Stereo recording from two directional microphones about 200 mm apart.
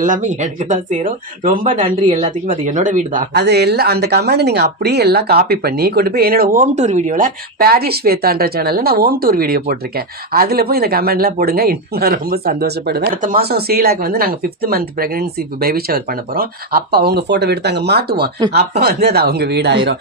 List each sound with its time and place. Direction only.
0.0 s speech: 40° right (ahead or behind)
1.6 s a man's voice: 25° right (ahead or behind)
2.1 s speech: 40° right (ahead or behind)